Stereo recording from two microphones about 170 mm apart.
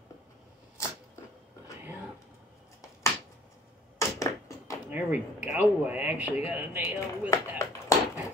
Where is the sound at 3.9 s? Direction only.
20° left (ahead or behind).